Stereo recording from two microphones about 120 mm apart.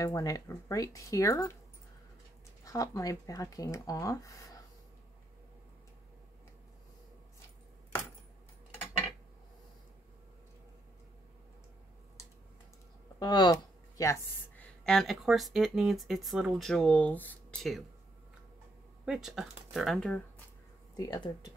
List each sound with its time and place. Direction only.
0.0 s speech: 30° left (ahead or behind)
2.6 s speech: 30° left (ahead or behind)
13.2 s speech: 35° left (ahead or behind)
14.9 s speech: centre (ahead or behind)
17.6 s speech: centre (ahead or behind)
19.0 s speech: 5° right (ahead or behind)
20.9 s speech: 35° left (ahead or behind)